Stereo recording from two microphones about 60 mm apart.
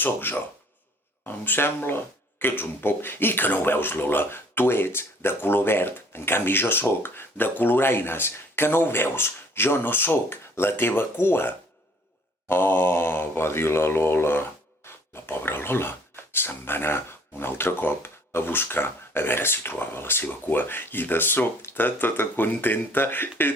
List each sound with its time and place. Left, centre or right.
0.0 s speech: left